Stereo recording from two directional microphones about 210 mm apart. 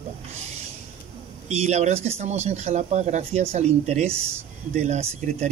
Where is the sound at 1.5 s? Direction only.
30° right (ahead or behind).